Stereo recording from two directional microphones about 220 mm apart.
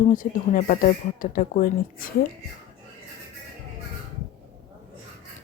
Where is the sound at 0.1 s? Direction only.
35° left (ahead or behind).